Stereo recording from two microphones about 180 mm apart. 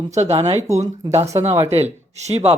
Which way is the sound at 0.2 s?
35° right (ahead or behind).